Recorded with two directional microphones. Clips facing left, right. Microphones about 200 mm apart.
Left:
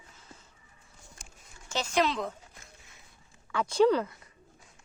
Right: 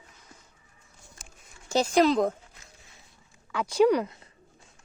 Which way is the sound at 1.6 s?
35° right (ahead or behind).